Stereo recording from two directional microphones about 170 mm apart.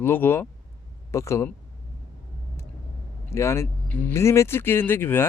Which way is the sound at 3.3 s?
15° left (ahead or behind).